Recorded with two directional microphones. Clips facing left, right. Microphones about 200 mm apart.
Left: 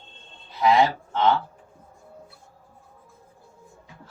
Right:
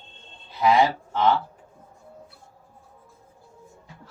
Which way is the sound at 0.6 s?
Centre (ahead or behind).